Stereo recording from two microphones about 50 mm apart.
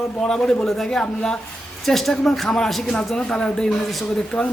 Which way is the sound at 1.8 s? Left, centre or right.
Centre.